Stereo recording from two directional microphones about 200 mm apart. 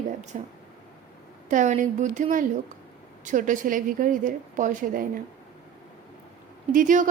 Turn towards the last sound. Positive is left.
turn(degrees=-40)  # may be behind; listen again after turning